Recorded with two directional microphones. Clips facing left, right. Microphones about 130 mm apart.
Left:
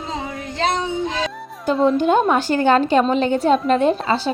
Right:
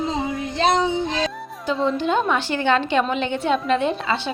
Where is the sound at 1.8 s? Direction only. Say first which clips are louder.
Left 5 dB; 50° left (ahead or behind).